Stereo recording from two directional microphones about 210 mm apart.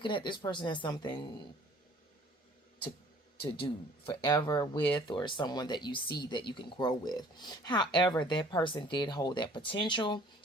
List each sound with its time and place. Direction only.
0.0 s speech: 20° left (ahead or behind)
3.4 s speech: 25° left (ahead or behind)